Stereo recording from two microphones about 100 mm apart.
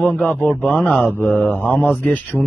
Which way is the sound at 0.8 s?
20° left (ahead or behind).